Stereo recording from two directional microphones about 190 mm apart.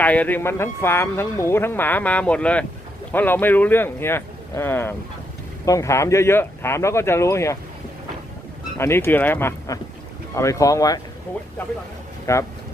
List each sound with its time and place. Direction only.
0.0 s speech: 10° left (ahead or behind)
8.8 s speech: 15° left (ahead or behind)
12.2 s speech: 15° left (ahead or behind)